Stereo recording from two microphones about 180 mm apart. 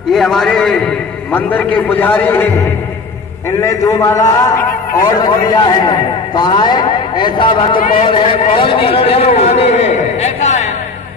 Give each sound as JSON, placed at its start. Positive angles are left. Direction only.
{"t": 0.1, "sound": "a man's voice", "side_deg": 0}